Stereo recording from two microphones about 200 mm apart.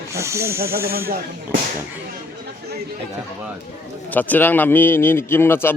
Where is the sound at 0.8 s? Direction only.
50° right (ahead or behind).